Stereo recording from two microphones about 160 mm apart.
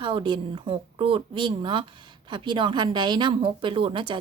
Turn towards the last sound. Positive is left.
turn(degrees=-30)  # may be behind; listen again after turning